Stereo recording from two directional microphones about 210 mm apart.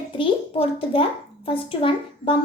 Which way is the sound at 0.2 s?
25° left (ahead or behind).